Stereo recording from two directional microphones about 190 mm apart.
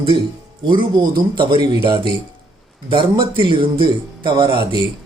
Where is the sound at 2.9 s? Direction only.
25° right (ahead or behind).